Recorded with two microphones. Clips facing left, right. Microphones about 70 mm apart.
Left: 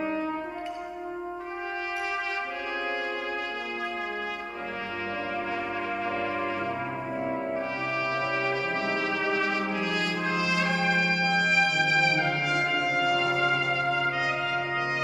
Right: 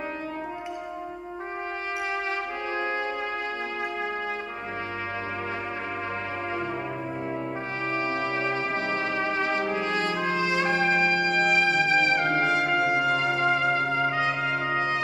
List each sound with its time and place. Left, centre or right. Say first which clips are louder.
8.0 s music: even; right
13.4 s brass instrument: right 2 dB; right